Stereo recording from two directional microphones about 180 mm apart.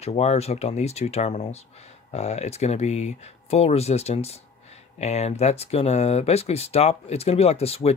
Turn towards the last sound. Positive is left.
turn(degrees=35)  # may be behind; listen again after turning